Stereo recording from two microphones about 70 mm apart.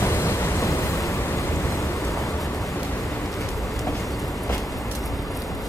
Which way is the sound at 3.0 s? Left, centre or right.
Centre.